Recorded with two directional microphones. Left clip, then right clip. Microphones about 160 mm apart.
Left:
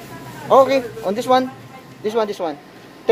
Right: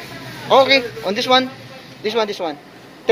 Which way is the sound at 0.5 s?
25° left (ahead or behind).